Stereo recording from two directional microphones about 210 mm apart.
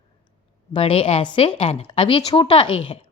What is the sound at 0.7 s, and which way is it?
Speech, 25° left (ahead or behind).